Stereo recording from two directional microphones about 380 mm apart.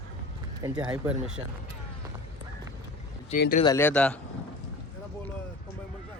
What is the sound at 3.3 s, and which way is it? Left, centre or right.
Speech, left.